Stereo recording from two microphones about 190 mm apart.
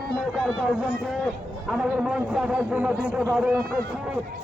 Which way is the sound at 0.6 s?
Centre (ahead or behind).